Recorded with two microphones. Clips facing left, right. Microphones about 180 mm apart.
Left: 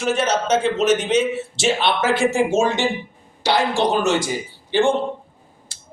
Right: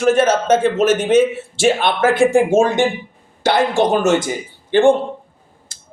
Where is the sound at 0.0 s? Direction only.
50° right (ahead or behind).